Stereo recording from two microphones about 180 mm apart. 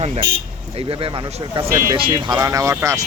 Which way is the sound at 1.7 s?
15° right (ahead or behind).